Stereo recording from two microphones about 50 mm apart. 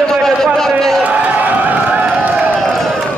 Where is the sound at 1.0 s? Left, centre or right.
Right.